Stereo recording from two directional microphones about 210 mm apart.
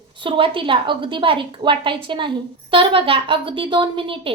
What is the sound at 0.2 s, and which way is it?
A woman's voice, 25° right (ahead or behind).